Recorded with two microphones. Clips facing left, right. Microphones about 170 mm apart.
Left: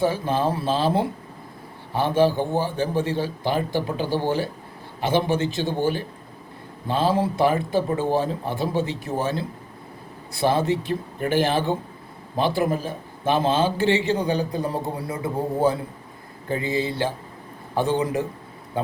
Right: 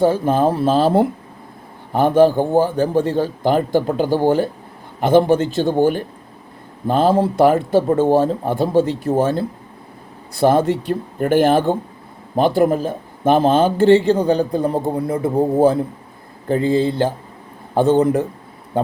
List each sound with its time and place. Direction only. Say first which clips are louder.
0.0 s a man's voice: right 7 dB; 50° right (ahead or behind)
10.4 s a man's voice: right 6 dB; 50° right (ahead or behind)
16.7 s a man's voice: right 7 dB; 50° right (ahead or behind)